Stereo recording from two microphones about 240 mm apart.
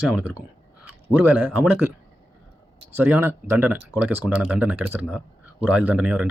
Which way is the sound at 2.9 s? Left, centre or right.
Centre.